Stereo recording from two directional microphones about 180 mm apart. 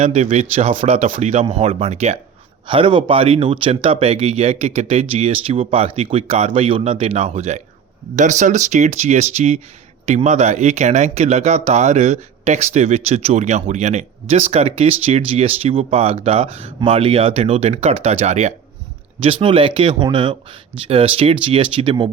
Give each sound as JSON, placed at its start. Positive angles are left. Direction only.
{"t": 0.0, "sound": "speech", "side_deg": -35}